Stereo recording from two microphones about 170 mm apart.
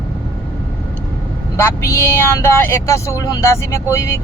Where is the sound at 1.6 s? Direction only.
15° left (ahead or behind).